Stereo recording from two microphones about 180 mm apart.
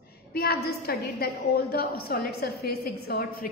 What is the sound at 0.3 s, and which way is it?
A woman's voice, 60° left (ahead or behind).